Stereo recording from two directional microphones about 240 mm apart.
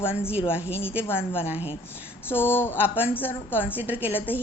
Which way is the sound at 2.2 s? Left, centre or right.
Centre.